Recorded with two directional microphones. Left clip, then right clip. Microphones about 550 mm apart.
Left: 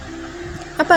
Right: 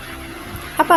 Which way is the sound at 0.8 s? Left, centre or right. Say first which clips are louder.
Even; right.